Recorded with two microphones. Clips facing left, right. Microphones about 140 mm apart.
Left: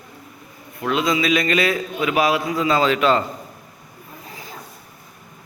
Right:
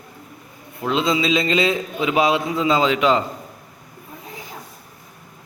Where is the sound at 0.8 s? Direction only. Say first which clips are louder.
Even; 25° right (ahead or behind).